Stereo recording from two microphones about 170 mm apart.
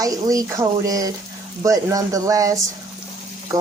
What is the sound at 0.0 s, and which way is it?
A woman's voice, 20° right (ahead or behind).